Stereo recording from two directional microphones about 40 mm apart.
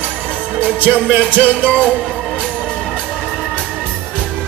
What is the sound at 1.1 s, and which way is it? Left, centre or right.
Music, right.